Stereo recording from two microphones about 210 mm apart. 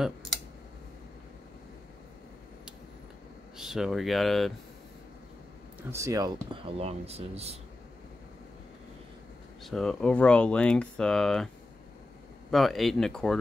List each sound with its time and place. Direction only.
0.0 s a sound: centre (ahead or behind)
3.5 s speech: centre (ahead or behind)
5.9 s speech: 15° right (ahead or behind); by 7.5 s 30° right (ahead or behind)
9.6 s speech: centre (ahead or behind)
12.4 s speech: centre (ahead or behind)